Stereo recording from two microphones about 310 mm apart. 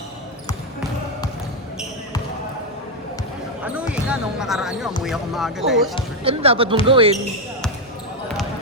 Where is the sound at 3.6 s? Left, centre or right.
Centre.